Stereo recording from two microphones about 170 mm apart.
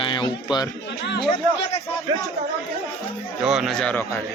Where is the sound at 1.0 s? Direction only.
90° left.